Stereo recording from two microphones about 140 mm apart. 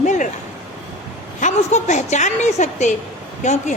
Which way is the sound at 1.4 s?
55° left (ahead or behind).